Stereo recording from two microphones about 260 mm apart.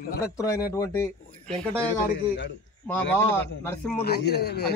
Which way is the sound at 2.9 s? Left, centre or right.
Centre.